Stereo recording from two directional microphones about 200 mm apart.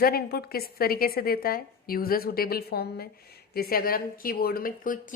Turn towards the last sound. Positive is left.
turn(degrees=40)  # may be behind; listen again after turning